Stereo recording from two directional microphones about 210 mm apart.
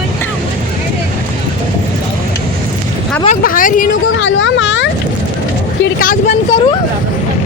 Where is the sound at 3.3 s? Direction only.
40° left (ahead or behind).